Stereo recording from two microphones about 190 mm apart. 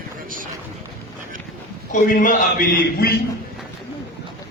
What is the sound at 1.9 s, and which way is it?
A man's voice, 45° left (ahead or behind).